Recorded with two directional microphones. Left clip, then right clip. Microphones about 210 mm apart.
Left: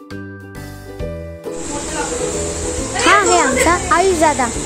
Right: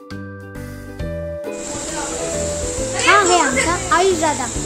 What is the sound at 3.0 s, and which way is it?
Children playing, 45° left (ahead or behind).